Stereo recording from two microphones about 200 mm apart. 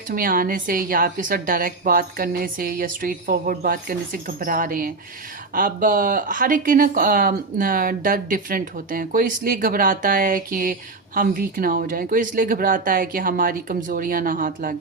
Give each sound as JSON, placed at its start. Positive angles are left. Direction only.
{"t": 0.1, "sound": "speech", "side_deg": -45}